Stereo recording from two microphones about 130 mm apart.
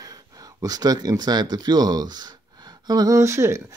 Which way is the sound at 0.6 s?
30° right (ahead or behind).